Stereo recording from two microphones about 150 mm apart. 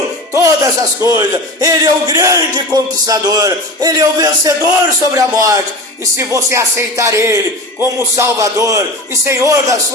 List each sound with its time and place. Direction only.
0.3 s a man's voice: 20° right (ahead or behind)